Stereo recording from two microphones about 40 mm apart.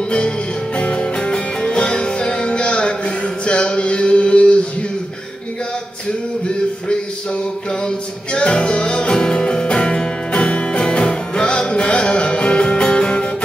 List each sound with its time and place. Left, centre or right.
0.7 s music: left
7.8 s music: left